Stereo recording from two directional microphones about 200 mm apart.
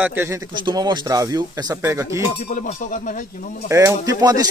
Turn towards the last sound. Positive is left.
turn(degrees=-20)  # may be behind; listen again after turning